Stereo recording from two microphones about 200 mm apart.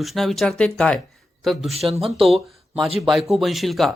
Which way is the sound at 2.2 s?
Centre (ahead or behind).